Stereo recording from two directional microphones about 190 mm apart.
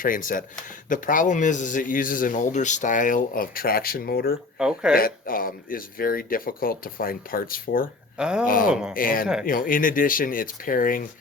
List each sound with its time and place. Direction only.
0.0 s speech: 45° left (ahead or behind)
4.5 s speech: 5° right (ahead or behind)
4.9 s speech: 50° left (ahead or behind)
8.2 s speech: 5° right (ahead or behind)
8.4 s speech: 45° left (ahead or behind)
8.7 s speech: 5° right (ahead or behind)
9.0 s speech: 45° left (ahead or behind)